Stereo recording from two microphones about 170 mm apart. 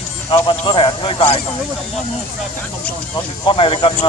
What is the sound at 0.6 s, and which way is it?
Speech, 30° left (ahead or behind).